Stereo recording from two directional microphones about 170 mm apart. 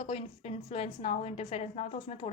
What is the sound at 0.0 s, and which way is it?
A woman's voice, 35° left (ahead or behind).